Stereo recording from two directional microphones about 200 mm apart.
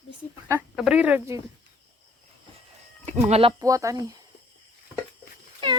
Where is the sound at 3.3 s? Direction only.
30° right (ahead or behind).